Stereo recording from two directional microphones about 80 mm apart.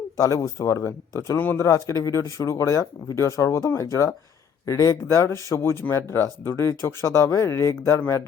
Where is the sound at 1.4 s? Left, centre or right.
Left.